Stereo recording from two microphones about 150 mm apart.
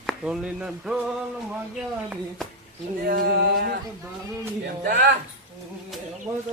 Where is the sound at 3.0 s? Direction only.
80° right.